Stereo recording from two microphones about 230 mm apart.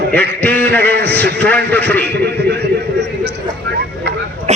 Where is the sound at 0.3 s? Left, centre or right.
Centre.